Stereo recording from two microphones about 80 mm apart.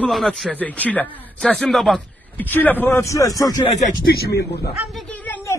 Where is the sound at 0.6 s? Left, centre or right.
Centre.